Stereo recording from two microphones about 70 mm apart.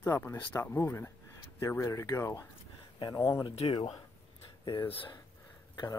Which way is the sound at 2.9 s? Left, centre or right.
Left.